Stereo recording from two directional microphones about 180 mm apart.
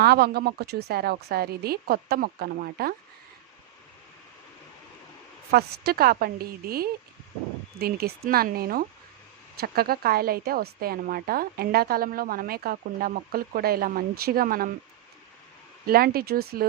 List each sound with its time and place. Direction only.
0.0 s a woman's voice: 60° right (ahead or behind)
5.5 s a woman's voice: 60° right (ahead or behind)
15.9 s a woman's voice: 55° right (ahead or behind)